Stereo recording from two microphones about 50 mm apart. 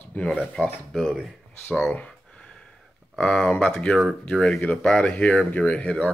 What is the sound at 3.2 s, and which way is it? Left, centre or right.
Speech, left.